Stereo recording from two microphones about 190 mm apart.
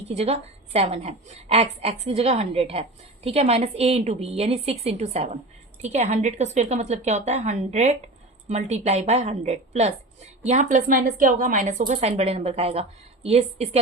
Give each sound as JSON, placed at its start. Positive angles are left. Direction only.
{"t": 0.1, "sound": "a woman's voice", "side_deg": -35}